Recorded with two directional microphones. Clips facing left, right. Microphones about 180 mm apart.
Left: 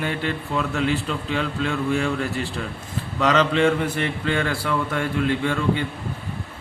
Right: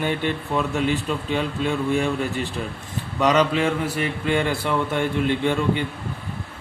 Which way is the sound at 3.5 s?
5° right (ahead or behind).